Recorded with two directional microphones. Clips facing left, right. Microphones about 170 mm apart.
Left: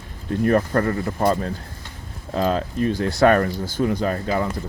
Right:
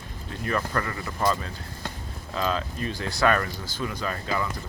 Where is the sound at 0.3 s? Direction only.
50° left (ahead or behind).